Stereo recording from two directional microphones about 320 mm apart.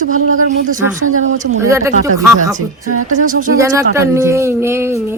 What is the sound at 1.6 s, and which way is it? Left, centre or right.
Speech, centre.